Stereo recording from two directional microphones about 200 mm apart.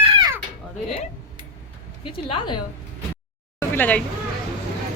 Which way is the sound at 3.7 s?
10° left (ahead or behind).